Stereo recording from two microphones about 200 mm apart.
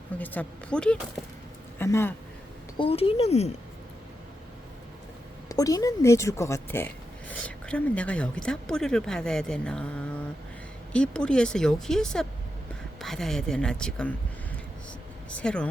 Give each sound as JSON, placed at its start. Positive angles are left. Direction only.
{"t": 0.2, "sound": "speech", "side_deg": 5}
{"t": 2.7, "sound": "speech", "side_deg": 25}
{"t": 5.5, "sound": "speech", "side_deg": 15}
{"t": 10.9, "sound": "speech", "side_deg": 5}
{"t": 15.3, "sound": "speech", "side_deg": 5}